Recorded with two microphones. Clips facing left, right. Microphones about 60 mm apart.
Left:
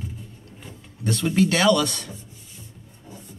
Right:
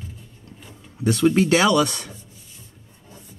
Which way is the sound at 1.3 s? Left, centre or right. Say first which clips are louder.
Left 2 dB; right.